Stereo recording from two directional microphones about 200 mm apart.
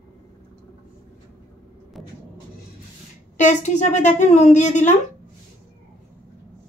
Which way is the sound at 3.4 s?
35° left (ahead or behind).